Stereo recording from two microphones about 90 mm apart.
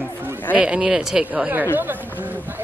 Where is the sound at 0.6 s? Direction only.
10° right (ahead or behind).